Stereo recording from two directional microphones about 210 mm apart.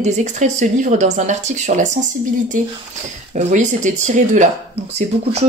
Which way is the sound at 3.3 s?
35° right (ahead or behind).